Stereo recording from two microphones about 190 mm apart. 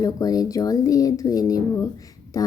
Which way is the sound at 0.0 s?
20° left (ahead or behind).